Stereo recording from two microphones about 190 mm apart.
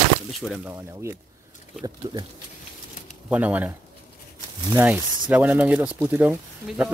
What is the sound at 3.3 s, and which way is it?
Speech, 10° right (ahead or behind).